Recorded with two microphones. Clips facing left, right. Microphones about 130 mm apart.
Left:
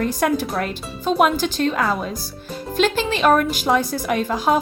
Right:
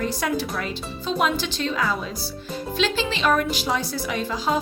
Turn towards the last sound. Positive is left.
turn(degrees=55)  # may be behind; listen again after turning